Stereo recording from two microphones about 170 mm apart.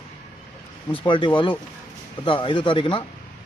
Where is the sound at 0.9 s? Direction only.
30° left (ahead or behind).